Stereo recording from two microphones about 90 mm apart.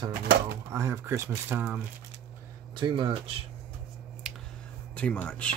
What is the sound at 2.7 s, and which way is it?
Speech, 65° right (ahead or behind).